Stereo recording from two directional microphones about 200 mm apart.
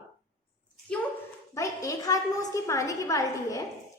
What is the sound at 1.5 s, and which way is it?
A woman's voice, 15° left (ahead or behind).